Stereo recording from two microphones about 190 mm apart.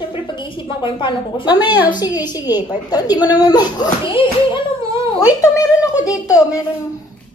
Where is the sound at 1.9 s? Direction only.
20° left (ahead or behind).